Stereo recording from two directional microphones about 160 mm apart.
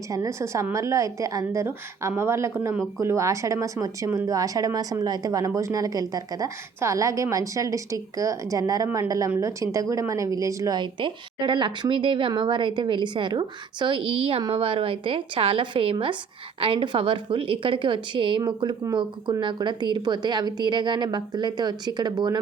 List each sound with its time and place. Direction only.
0.1 s a woman's voice: 20° right (ahead or behind)